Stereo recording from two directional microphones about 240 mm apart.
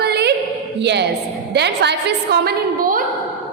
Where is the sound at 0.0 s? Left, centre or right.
Right.